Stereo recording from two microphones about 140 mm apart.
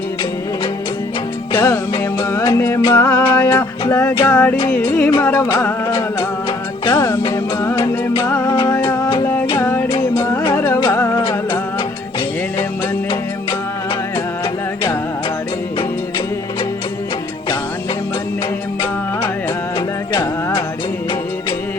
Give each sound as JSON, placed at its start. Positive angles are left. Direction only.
{"t": 1.5, "sound": "music", "side_deg": 15}
{"t": 6.8, "sound": "music", "side_deg": 15}
{"t": 8.2, "sound": "music", "side_deg": 15}